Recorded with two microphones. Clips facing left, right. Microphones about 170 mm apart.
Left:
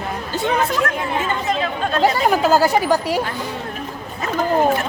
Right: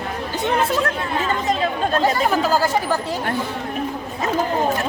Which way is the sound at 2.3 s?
15° left (ahead or behind).